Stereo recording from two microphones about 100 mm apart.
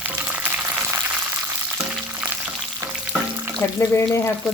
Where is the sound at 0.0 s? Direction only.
15° right (ahead or behind).